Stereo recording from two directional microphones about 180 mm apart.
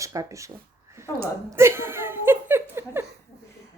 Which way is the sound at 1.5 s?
15° right (ahead or behind).